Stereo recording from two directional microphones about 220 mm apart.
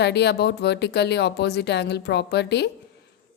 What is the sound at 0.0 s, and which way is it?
A woman's voice, 50° left (ahead or behind).